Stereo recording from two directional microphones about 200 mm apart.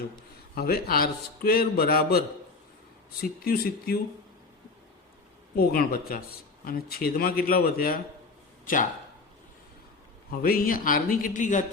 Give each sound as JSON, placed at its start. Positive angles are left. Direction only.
{"t": 0.5, "sound": "a man's voice", "side_deg": 50}
{"t": 5.5, "sound": "a man's voice", "side_deg": 50}
{"t": 10.4, "sound": "a man's voice", "side_deg": 45}